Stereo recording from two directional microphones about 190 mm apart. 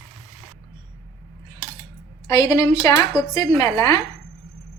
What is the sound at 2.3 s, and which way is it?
A woman's voice, 20° left (ahead or behind).